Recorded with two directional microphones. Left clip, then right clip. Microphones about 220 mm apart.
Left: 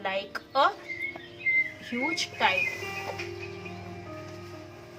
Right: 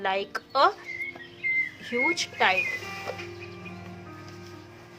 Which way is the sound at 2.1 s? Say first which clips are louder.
Right 2 dB; 45° right (ahead or behind).